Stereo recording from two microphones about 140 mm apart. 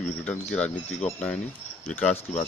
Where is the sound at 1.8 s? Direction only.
10° left (ahead or behind).